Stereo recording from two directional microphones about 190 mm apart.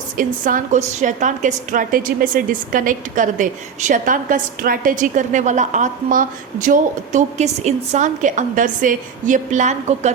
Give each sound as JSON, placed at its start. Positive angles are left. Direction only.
{"t": 0.2, "sound": "a woman's voice", "side_deg": -45}